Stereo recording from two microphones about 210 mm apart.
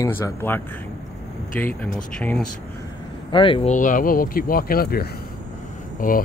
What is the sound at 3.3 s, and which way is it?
Speech, 25° left (ahead or behind).